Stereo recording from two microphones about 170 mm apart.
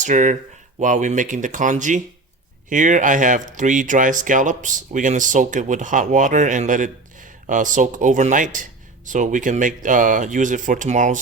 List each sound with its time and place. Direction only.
0.0 s speech: 45° right (ahead or behind)